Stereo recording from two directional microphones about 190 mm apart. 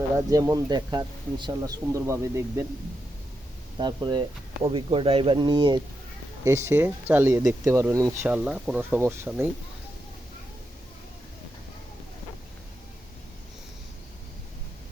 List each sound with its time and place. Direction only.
0.3 s speech: 20° right (ahead or behind)
3.8 s speech: 25° right (ahead or behind)
8.4 s speech: 5° right (ahead or behind)